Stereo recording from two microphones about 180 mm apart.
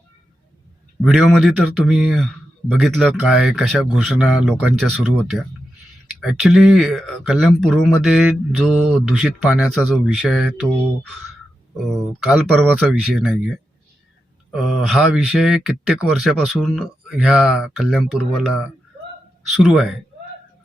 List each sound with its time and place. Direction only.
1.0 s speech: centre (ahead or behind)
6.1 s speech: centre (ahead or behind)
11.9 s speech: centre (ahead or behind)
14.5 s speech: centre (ahead or behind)
19.6 s speech: centre (ahead or behind)